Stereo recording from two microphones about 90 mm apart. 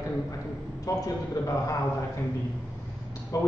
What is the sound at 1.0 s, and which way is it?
Speech, 35° left (ahead or behind).